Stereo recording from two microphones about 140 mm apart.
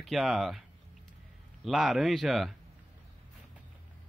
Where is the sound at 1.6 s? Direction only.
Centre (ahead or behind).